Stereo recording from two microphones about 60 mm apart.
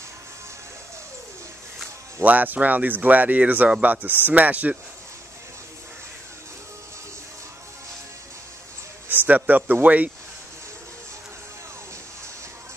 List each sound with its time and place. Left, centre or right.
2.2 s speech: right
9.1 s speech: right